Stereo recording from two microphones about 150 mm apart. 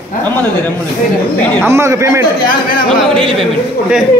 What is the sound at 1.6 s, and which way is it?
Speech, 20° right (ahead or behind).